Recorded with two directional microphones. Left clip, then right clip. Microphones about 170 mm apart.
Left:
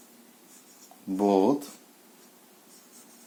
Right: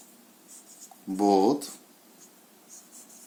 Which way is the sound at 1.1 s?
50° left (ahead or behind).